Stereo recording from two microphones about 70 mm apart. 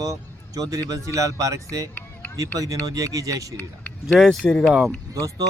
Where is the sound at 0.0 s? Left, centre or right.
Right.